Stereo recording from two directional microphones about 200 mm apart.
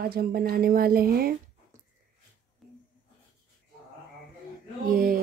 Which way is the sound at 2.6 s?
Centre (ahead or behind).